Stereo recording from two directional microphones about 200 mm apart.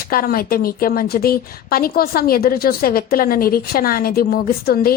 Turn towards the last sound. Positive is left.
turn(degrees=50)  # may be behind; listen again after turning